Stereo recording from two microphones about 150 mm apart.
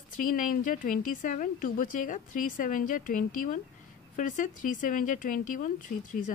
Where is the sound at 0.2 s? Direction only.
65° left (ahead or behind).